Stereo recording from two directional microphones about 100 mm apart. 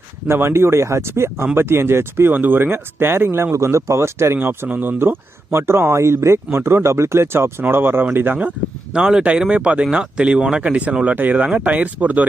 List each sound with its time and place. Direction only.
0.3 s speech: 25° right (ahead or behind)